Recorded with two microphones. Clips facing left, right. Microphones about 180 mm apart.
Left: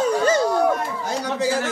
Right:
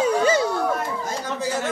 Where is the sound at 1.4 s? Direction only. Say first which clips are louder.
Left 5 dB; 90° left.